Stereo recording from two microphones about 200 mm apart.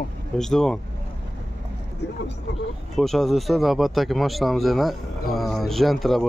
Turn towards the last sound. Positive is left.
turn(degrees=0)  # may be behind; listen again after turning